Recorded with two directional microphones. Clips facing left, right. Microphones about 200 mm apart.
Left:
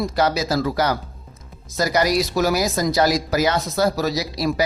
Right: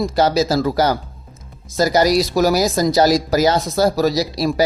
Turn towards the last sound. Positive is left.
turn(degrees=-35)  # may be behind; listen again after turning